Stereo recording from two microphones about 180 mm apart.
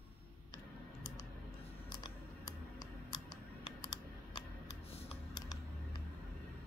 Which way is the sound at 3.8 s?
20° left (ahead or behind).